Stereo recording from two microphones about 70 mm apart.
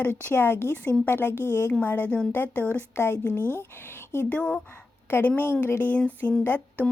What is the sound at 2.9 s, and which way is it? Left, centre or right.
Speech, left.